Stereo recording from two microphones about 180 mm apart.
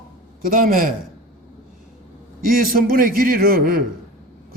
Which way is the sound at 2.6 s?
50° right (ahead or behind).